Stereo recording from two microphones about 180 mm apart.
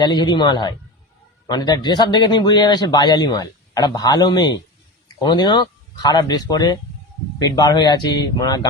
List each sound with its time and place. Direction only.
0.0 s a man's voice: 25° left (ahead or behind)